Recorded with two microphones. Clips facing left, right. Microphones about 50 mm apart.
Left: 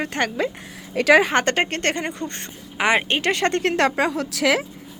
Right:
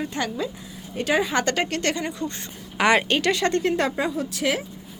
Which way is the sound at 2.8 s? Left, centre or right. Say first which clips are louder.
Even; left.